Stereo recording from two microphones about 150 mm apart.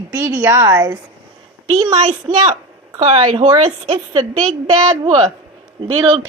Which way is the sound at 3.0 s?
40° right (ahead or behind).